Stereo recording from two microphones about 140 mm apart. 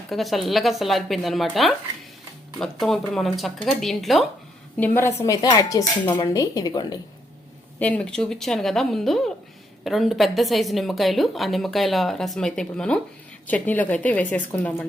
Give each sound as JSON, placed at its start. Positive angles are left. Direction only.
{"t": 0.1, "sound": "a woman's voice", "side_deg": 0}
{"t": 4.8, "sound": "speech", "side_deg": 20}
{"t": 7.8, "sound": "a woman's voice", "side_deg": 10}